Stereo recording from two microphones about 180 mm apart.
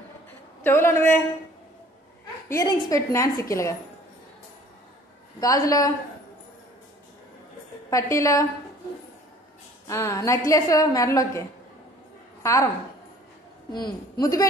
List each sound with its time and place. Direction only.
0.7 s a woman's voice: 15° left (ahead or behind)
2.5 s a woman's voice: 15° left (ahead or behind)
5.4 s a woman's voice: 20° left (ahead or behind)
7.9 s a woman's voice: 15° left (ahead or behind)
9.8 s a woman's voice: 15° left (ahead or behind)
12.4 s a woman's voice: 15° left (ahead or behind)
14.2 s a woman's voice: 20° left (ahead or behind)